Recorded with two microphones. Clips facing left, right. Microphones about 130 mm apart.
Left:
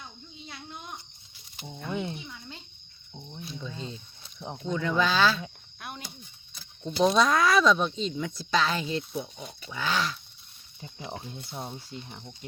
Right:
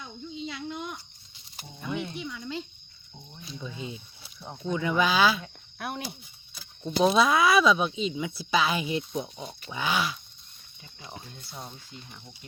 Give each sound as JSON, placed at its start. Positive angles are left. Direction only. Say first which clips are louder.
{"t": 0.4, "sound": "a sound", "louder": "right 7 dB", "side_deg": -90}
{"t": 1.9, "sound": "cricket", "louder": "even", "side_deg": 25}
{"t": 2.1, "sound": "a sound", "louder": "right 8 dB", "side_deg": -90}
{"t": 3.6, "sound": "speech", "louder": "right 3 dB", "side_deg": -10}
{"t": 4.4, "sound": "speech", "louder": "even", "side_deg": 15}
{"t": 4.7, "sound": "speech", "louder": "right 1 dB", "side_deg": -10}
{"t": 5.8, "sound": "cricket", "louder": "right 7 dB", "side_deg": -70}
{"t": 6.5, "sound": "speech", "louder": "right 5 dB", "side_deg": -5}
{"t": 10.8, "sound": "speech", "louder": "left 6 dB", "side_deg": 30}